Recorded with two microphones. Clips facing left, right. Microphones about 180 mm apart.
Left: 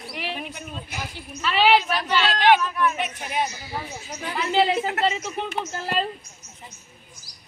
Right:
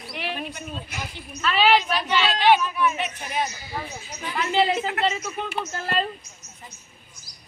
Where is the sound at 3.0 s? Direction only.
60° left (ahead or behind).